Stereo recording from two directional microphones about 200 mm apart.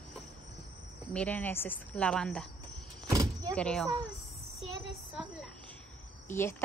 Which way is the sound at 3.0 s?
15° right (ahead or behind).